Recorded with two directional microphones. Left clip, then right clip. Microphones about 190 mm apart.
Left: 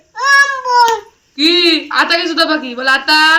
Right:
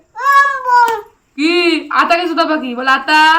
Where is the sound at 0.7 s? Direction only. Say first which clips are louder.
Even; 20° right (ahead or behind).